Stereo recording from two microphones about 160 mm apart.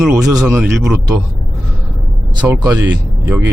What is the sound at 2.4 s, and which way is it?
Speech, 20° right (ahead or behind).